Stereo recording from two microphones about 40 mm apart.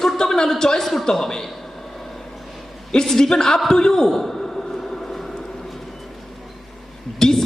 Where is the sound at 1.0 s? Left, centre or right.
Centre.